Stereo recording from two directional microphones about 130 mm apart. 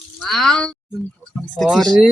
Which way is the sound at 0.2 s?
Centre (ahead or behind).